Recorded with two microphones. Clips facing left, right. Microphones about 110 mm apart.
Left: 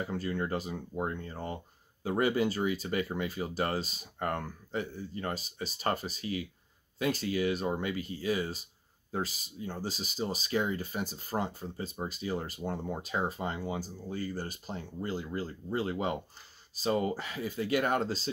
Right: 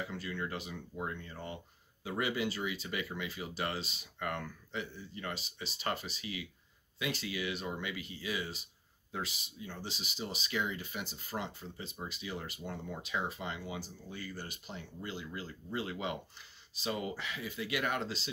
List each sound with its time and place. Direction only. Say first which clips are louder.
0.0 s speech: left 6 dB; 40° left (ahead or behind)